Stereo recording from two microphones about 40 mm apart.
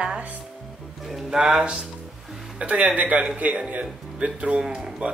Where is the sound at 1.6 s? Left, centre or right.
Right.